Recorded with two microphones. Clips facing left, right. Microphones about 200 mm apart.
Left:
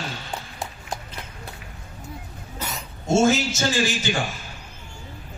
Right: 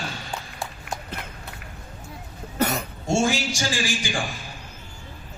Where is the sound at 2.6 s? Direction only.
60° right (ahead or behind).